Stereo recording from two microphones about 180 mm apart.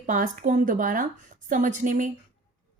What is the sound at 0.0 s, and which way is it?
Speech, 45° right (ahead or behind).